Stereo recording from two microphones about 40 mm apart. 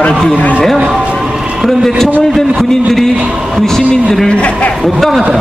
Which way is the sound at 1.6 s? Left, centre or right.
Centre.